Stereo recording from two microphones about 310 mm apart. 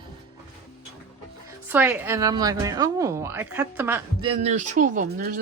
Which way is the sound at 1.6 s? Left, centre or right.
Centre.